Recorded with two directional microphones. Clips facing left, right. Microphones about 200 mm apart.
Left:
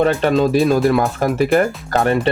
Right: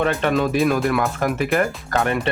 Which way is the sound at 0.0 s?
35° left (ahead or behind).